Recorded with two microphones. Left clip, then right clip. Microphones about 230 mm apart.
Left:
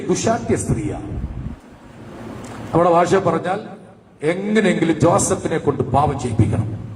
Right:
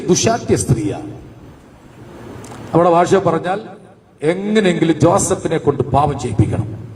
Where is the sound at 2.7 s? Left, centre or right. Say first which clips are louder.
Right 3 dB; right.